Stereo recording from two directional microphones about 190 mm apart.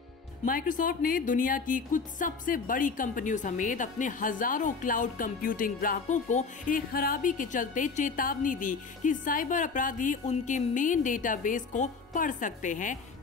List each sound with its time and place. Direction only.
0.5 s a woman's voice: 45° left (ahead or behind)